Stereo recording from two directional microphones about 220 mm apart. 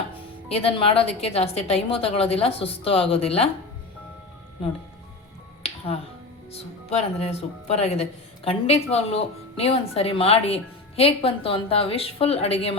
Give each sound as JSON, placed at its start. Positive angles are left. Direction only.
{"t": 0.4, "sound": "a woman's voice", "side_deg": 25}
{"t": 5.6, "sound": "finger snapping", "side_deg": 25}
{"t": 6.5, "sound": "a woman's voice", "side_deg": 25}